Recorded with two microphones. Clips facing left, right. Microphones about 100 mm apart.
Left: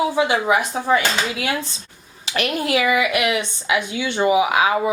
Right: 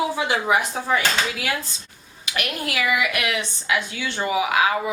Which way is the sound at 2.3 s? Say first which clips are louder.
Left 7 dB; 30° left (ahead or behind).